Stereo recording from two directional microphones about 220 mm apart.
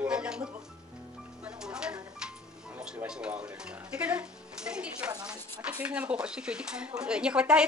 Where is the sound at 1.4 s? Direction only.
5° right (ahead or behind).